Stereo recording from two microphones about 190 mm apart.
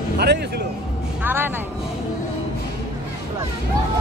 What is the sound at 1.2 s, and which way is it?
Music, 10° right (ahead or behind).